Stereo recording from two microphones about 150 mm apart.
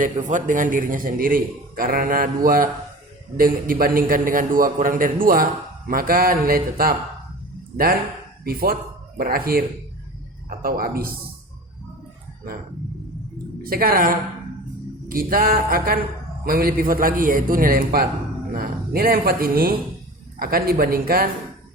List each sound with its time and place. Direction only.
0.0 s a man's voice: 55° right (ahead or behind); by 6.9 s 75° right (ahead or behind)
8.4 s a man's voice: 85° right
13.6 s a woman's voice: 80° right